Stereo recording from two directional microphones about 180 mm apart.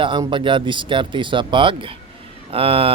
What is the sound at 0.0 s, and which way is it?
Speech, 25° right (ahead or behind).